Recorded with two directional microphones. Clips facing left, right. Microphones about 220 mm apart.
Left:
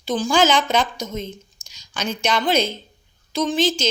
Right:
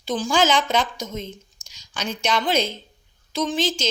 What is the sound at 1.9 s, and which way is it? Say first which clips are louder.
Speech: left 2 dB; 50° left (ahead or behind).